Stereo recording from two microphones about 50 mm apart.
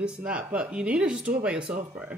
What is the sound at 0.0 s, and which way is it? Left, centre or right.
Speech, centre.